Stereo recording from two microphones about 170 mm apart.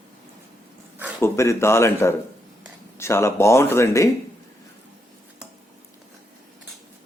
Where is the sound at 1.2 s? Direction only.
15° left (ahead or behind).